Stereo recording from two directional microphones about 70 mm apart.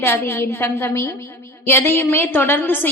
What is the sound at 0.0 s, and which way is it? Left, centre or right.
A woman's voice, left.